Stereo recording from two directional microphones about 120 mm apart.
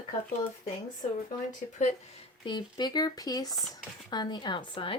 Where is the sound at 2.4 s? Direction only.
35° left (ahead or behind).